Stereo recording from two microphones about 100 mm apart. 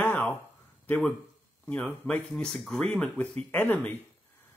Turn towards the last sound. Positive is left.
turn(degrees=20)  # may be behind; listen again after turning